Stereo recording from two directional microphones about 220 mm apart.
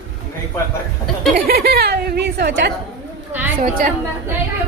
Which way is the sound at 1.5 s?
45° right (ahead or behind).